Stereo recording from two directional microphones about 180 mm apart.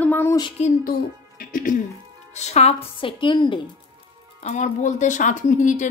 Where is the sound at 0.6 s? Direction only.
40° left (ahead or behind).